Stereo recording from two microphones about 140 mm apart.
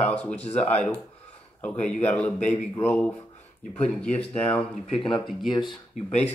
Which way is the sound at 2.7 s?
15° left (ahead or behind).